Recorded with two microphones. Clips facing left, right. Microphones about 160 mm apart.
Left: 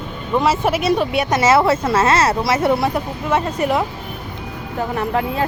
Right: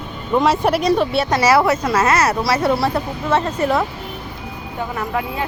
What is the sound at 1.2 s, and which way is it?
Speech, 20° left (ahead or behind).